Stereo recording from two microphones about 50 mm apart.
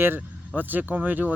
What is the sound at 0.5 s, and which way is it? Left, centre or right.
Speech, right.